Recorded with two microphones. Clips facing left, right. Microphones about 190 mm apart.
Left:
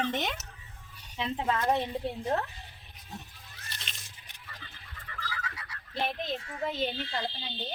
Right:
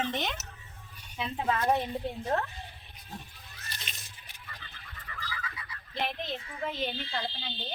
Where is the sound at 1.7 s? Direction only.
25° left (ahead or behind).